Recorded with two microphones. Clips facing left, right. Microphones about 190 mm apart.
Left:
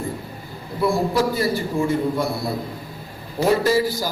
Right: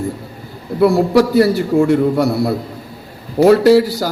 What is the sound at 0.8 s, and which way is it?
A man's voice, 65° right (ahead or behind).